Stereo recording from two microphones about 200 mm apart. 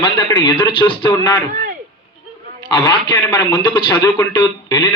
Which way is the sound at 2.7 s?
20° left (ahead or behind).